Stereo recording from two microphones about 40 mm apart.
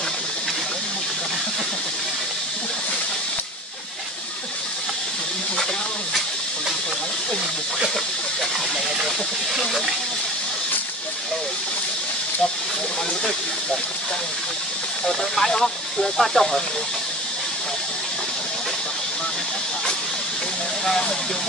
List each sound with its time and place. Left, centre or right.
9.6 s speech: centre
15.0 s speech: centre